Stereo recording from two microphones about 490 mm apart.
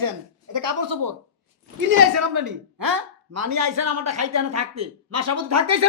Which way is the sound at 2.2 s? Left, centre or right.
Right.